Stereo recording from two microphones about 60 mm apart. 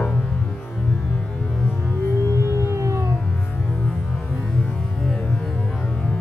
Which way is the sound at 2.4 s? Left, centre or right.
Right.